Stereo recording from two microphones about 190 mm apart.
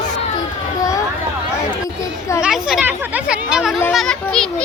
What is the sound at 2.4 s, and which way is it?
A child's voice, 5° right (ahead or behind).